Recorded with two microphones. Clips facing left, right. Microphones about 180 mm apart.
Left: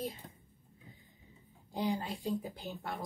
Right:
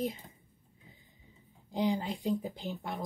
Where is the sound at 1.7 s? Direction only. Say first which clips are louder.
Right 4 dB; 20° right (ahead or behind).